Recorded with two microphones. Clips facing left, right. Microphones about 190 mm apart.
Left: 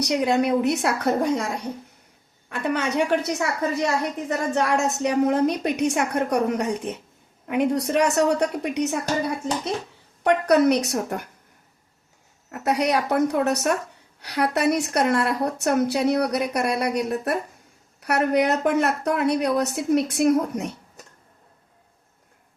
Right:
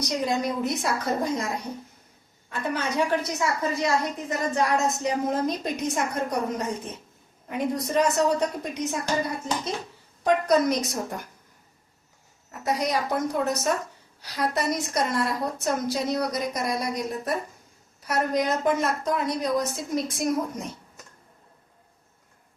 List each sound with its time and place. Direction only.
0.0 s a woman's voice: 70° left (ahead or behind)
2.5 s a woman's voice: 65° left (ahead or behind)
10.2 s a woman's voice: 65° left (ahead or behind)
12.5 s a woman's voice: 65° left (ahead or behind)